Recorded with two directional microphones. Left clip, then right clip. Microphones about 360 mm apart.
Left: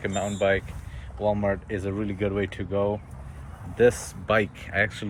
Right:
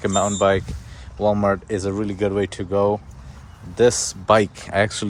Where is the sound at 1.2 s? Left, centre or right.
Centre.